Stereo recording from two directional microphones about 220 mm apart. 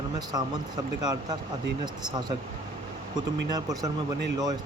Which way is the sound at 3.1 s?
15° right (ahead or behind).